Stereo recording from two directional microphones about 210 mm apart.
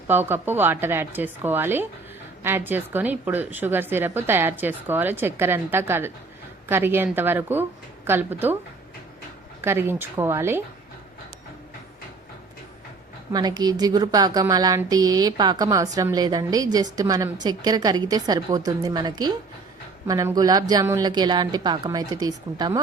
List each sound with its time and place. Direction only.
0.1 s a woman's voice: 10° right (ahead or behind)
9.6 s a woman's voice: 10° right (ahead or behind)
13.3 s a woman's voice: 20° right (ahead or behind)